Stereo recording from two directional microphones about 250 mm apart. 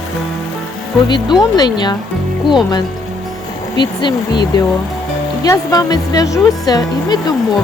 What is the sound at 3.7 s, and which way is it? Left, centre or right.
Speech, centre.